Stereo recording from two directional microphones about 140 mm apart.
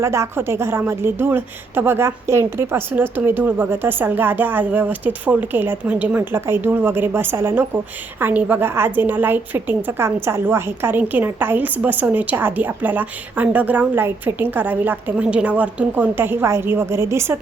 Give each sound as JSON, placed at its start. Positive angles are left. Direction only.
{"t": 0.0, "sound": "a woman's voice", "side_deg": -20}